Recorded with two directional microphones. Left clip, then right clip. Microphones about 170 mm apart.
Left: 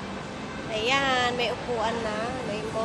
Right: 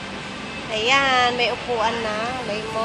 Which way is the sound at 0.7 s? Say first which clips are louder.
Right 6 dB; 35° right (ahead or behind).